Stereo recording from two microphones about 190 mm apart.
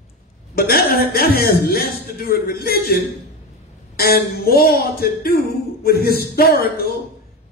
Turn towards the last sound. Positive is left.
turn(degrees=55)  # may be behind; listen again after turning